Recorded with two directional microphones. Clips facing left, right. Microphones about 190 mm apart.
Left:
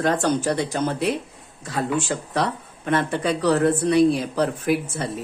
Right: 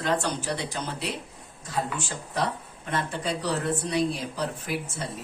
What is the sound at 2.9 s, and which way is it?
Speech, 65° left (ahead or behind).